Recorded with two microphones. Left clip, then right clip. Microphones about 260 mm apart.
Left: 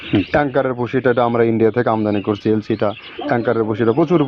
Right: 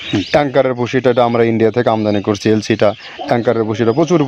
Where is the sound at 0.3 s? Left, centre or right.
Right.